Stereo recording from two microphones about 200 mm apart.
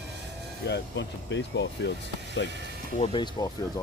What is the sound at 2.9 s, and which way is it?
Speech, 25° left (ahead or behind).